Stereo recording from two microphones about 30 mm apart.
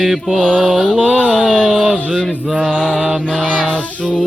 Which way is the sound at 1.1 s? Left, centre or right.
Left.